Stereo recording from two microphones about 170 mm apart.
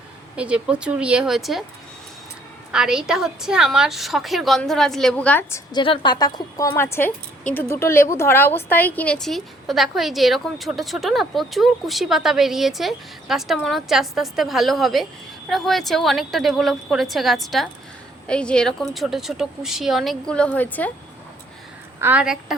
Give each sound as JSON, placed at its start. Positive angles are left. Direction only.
{"t": 0.3, "sound": "a woman's voice", "side_deg": -5}
{"t": 2.7, "sound": "a woman's voice", "side_deg": -5}
{"t": 5.8, "sound": "a woman's voice", "side_deg": 30}
{"t": 22.0, "sound": "a woman's voice", "side_deg": -5}